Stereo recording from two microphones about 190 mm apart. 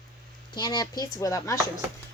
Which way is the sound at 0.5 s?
20° left (ahead or behind).